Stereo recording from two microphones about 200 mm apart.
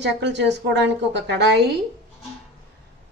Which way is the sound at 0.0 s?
60° right (ahead or behind).